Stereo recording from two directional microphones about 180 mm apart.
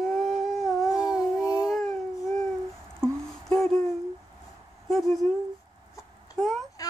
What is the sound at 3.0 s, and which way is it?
Music, centre (ahead or behind).